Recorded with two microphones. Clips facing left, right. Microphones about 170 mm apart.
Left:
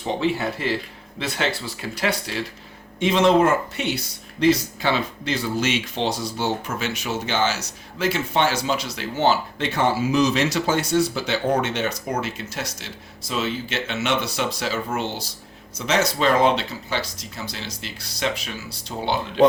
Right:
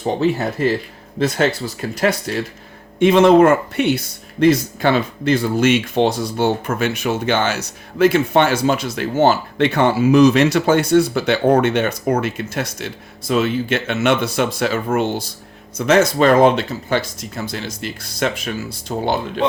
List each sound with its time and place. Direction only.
0.0 s speech: 45° right (ahead or behind)